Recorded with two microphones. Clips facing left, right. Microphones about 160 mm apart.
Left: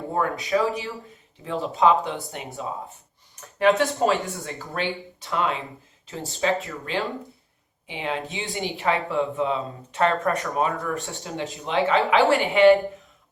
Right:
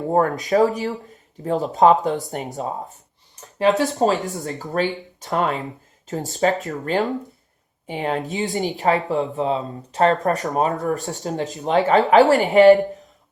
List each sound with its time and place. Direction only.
0.1 s speech: 40° right (ahead or behind)
3.8 s speech: 40° right (ahead or behind)